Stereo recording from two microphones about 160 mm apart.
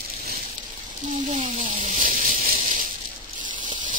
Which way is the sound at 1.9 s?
55° right (ahead or behind).